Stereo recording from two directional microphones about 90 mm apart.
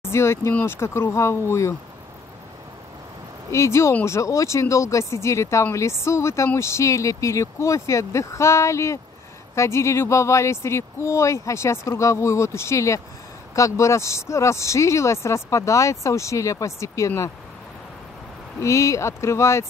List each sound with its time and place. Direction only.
0.1 s speech: 30° left (ahead or behind)
3.5 s speech: 35° left (ahead or behind)
18.6 s speech: 35° left (ahead or behind)